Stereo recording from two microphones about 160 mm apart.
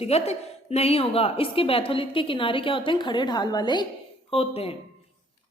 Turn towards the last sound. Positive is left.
turn(degrees=35)  # may be behind; listen again after turning